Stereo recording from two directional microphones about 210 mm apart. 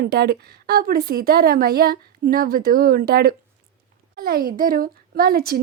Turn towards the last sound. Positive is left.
turn(degrees=-45)  # may be behind; listen again after turning